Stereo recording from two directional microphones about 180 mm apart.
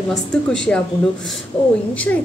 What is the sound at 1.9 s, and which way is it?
Speech, 10° left (ahead or behind).